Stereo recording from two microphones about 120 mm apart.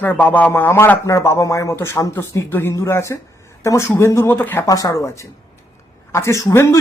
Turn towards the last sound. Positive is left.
turn(degrees=20)  # may be behind; listen again after turning